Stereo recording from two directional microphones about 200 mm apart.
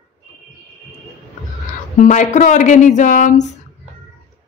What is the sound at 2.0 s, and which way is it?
Speech, 35° left (ahead or behind).